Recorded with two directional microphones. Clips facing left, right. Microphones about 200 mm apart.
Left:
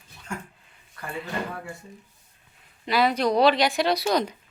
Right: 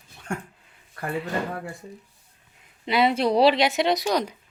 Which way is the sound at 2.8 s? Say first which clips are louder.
Right 1 dB; 25° right (ahead or behind).